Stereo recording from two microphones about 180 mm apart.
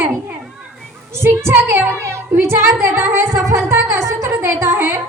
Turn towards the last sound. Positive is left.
turn(degrees=-15)  # may be behind; listen again after turning